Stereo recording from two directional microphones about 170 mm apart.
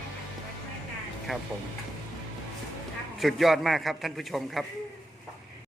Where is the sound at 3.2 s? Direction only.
Centre (ahead or behind).